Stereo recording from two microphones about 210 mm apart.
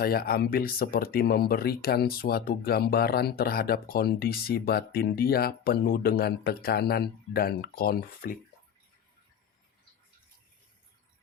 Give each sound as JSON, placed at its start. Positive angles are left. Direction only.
{"t": 0.0, "sound": "speech", "side_deg": 45}